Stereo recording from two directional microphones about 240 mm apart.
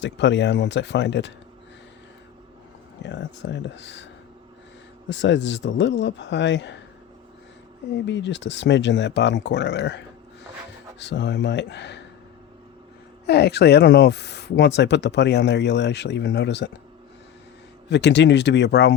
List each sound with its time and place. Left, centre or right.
0.0 s speech: left
3.0 s speech: left
8.0 s speech: left
11.0 s speech: left
13.2 s speech: left
17.8 s speech: left